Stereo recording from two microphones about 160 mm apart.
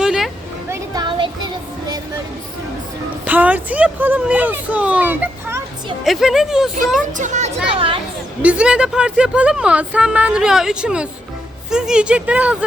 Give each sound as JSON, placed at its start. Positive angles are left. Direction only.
{"t": 0.0, "sound": "a sound", "side_deg": -5}
{"t": 0.7, "sound": "a sound", "side_deg": -25}
{"t": 3.2, "sound": "a child's voice", "side_deg": -10}
{"t": 6.1, "sound": "speech", "side_deg": 0}
{"t": 7.1, "sound": "speech", "side_deg": -50}
{"t": 7.7, "sound": "speech", "side_deg": -35}
{"t": 8.4, "sound": "speech", "side_deg": -10}